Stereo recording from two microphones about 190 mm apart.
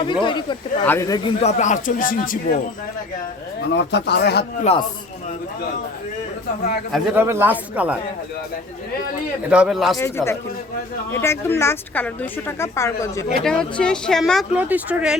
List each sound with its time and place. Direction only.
0.0 s speech: 25° left (ahead or behind)
1.4 s speech: 35° left (ahead or behind)
3.7 s speech: 65° left (ahead or behind)
6.9 s speech: 10° right (ahead or behind)
9.5 s speech: 5° right (ahead or behind)
10.0 s a woman's voice: 15° left (ahead or behind)
13.4 s speech: 5° left (ahead or behind)